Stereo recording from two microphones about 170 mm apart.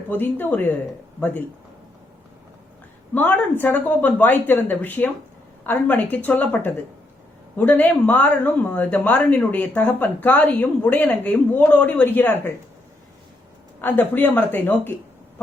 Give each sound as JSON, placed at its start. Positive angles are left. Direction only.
{"t": 0.1, "sound": "speech", "side_deg": 10}
{"t": 3.2, "sound": "speech", "side_deg": 10}
{"t": 13.8, "sound": "speech", "side_deg": 10}